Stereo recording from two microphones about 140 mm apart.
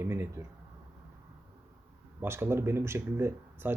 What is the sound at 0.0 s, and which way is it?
Speech, 20° right (ahead or behind).